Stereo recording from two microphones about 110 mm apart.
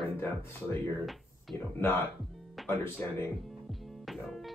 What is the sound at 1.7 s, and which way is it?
Speech, 20° left (ahead or behind).